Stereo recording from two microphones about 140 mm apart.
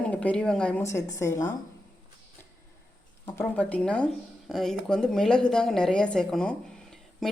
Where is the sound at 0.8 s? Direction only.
20° left (ahead or behind).